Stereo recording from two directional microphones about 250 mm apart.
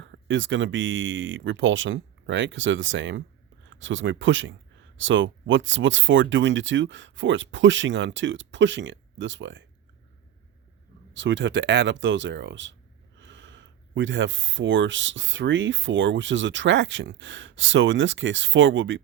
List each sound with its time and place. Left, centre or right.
0.0 s speech: right
11.1 s speech: right